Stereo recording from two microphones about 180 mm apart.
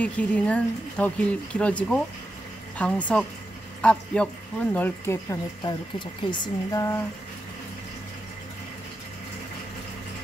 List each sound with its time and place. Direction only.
0.0 s speech: 10° left (ahead or behind)